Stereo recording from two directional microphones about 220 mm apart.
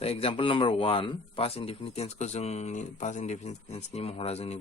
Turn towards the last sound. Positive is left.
turn(degrees=30)  # may be behind; listen again after turning